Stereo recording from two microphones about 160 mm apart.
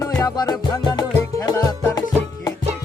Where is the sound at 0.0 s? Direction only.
20° left (ahead or behind).